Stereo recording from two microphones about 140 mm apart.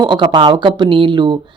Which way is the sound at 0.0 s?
35° right (ahead or behind).